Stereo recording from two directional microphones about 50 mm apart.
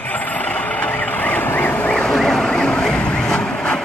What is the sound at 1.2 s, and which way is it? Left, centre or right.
Vehicle, left.